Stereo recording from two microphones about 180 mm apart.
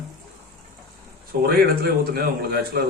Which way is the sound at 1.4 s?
55° right (ahead or behind).